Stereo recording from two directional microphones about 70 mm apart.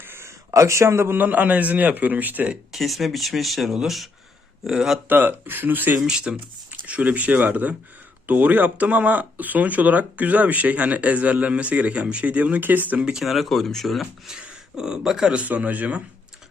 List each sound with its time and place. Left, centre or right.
0.0 s a man's voice: right
2.7 s speech: centre
5.0 s speech: right
6.1 s speech: centre
13.0 s speech: centre
13.2 s speech: centre
15.4 s speech: right